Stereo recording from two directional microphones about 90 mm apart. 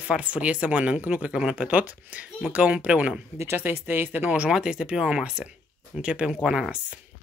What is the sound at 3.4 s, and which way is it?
Speech, 30° right (ahead or behind).